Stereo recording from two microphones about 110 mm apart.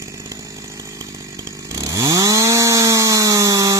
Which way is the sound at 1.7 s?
35° right (ahead or behind).